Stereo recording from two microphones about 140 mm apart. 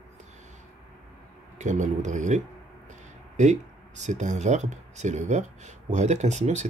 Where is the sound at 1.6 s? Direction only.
60° right (ahead or behind).